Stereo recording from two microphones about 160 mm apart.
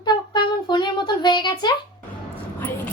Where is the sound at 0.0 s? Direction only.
30° left (ahead or behind).